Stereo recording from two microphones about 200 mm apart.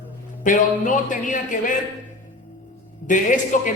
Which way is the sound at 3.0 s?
40° left (ahead or behind).